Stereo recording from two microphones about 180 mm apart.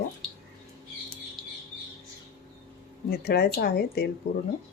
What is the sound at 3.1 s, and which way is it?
Speech, 60° left (ahead or behind).